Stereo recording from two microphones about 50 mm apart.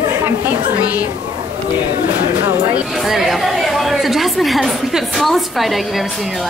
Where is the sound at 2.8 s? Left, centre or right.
Centre.